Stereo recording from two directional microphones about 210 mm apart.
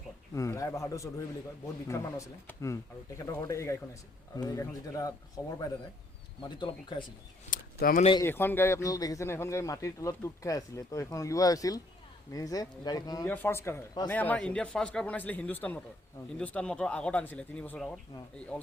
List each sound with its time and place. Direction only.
0.3 s a man's voice: 15° left (ahead or behind)
7.5 s a sound: 40° left (ahead or behind)
8.2 s a man's voice: 10° left (ahead or behind)